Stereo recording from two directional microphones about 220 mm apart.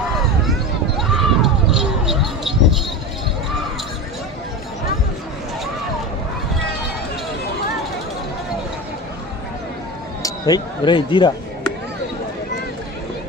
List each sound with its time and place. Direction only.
0.9 s basketball bounce: centre (ahead or behind)
10.2 s speech: 20° left (ahead or behind)